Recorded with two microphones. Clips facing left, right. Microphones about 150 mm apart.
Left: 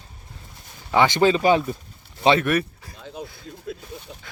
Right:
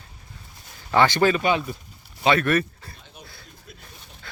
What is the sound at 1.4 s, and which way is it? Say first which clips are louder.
Speech: left 4 dB; 35° left (ahead or behind).